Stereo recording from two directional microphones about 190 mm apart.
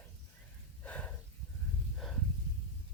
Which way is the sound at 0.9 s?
5° left (ahead or behind).